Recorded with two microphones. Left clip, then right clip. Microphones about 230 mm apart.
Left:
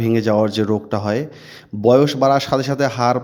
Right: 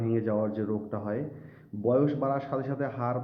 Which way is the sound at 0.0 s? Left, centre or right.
Left.